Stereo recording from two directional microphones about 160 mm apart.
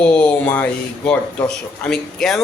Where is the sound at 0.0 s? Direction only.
5° left (ahead or behind).